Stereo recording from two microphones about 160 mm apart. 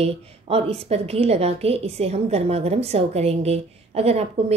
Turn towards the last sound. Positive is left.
turn(degrees=-40)  # may be behind; listen again after turning